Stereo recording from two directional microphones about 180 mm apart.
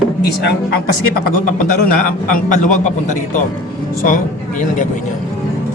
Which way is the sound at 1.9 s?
50° left (ahead or behind).